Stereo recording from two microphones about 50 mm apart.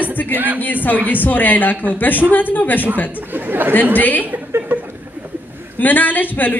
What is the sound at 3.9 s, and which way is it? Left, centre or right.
Speech, left.